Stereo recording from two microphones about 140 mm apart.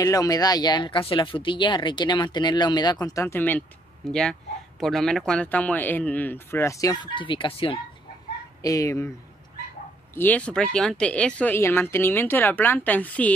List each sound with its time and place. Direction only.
0.0 s speech: 25° left (ahead or behind)
8.6 s speech: 25° left (ahead or behind)
10.1 s speech: 10° left (ahead or behind)